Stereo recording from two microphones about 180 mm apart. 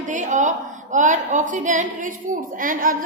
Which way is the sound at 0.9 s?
45° right (ahead or behind).